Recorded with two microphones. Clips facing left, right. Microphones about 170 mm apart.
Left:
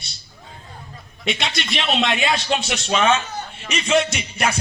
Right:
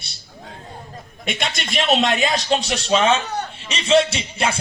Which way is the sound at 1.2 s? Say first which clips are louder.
Left 1 dB; 50° right (ahead or behind).